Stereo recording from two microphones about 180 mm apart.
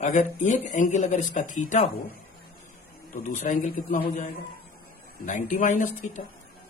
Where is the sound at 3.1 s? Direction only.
45° left (ahead or behind).